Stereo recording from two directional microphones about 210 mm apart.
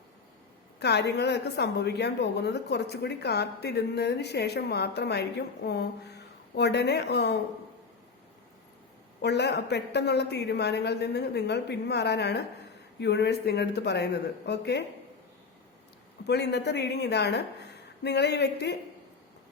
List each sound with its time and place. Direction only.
0.8 s a woman's voice: 55° left (ahead or behind)
9.2 s a woman's voice: 55° left (ahead or behind)
16.2 s a woman's voice: 55° left (ahead or behind)